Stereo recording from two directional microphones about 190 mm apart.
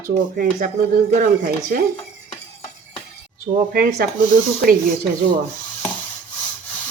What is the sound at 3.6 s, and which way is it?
Speech, 50° right (ahead or behind).